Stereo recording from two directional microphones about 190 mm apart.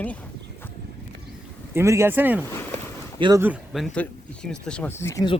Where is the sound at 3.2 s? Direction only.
20° right (ahead or behind).